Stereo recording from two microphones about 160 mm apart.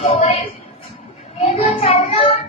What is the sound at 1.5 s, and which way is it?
Child singing, 35° left (ahead or behind).